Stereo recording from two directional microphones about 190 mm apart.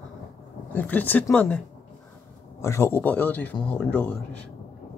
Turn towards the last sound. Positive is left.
turn(degrees=5)  # may be behind; listen again after turning